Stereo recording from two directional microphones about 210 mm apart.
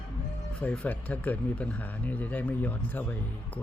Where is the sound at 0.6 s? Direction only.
5° left (ahead or behind).